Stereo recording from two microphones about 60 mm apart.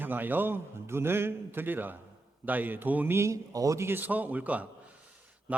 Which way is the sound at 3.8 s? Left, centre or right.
Right.